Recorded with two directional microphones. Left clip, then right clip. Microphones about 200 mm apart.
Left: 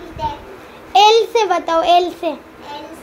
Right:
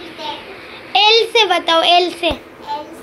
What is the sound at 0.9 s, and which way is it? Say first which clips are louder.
Babbling: left 1 dB; 10° left (ahead or behind).